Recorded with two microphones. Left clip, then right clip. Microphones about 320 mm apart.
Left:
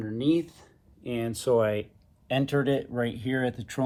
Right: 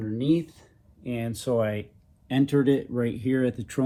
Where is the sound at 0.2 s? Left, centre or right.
Left.